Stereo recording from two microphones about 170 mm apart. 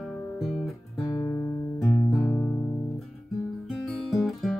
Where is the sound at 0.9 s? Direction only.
20° left (ahead or behind).